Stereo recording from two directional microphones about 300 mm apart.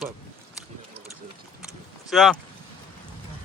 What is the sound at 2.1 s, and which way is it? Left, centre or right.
Speech, centre.